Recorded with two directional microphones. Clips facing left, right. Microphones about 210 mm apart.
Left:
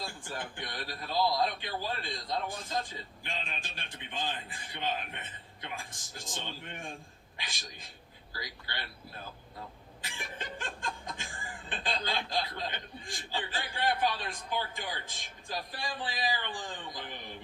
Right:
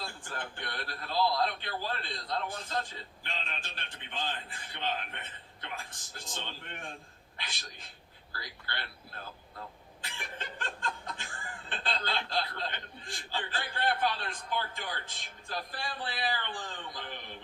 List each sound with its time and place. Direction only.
0.3 s a man's voice: 15° left (ahead or behind)
10.3 s snicker: 15° left (ahead or behind)
11.7 s a man's voice: 15° left (ahead or behind)